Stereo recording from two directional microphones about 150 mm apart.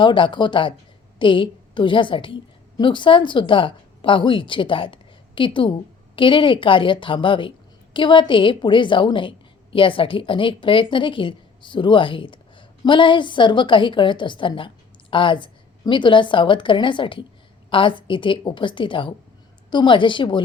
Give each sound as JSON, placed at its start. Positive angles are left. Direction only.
{"t": 0.0, "sound": "a woman's voice", "side_deg": 30}